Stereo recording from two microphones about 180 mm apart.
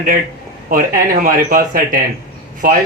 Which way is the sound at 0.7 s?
50° right (ahead or behind).